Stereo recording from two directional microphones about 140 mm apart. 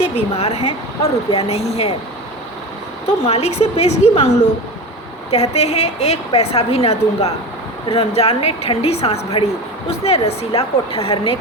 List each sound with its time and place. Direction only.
0.0 s a woman's voice: 50° left (ahead or behind)
3.2 s a woman's voice: 50° left (ahead or behind)